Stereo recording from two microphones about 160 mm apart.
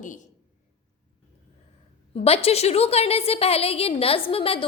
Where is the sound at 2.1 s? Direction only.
40° left (ahead or behind).